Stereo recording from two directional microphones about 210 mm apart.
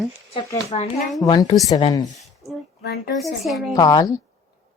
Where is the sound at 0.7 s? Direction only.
35° left (ahead or behind).